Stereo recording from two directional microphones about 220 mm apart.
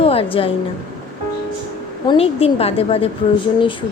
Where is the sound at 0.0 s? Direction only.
25° left (ahead or behind).